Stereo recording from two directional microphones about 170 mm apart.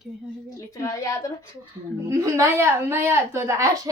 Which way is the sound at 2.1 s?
15° right (ahead or behind).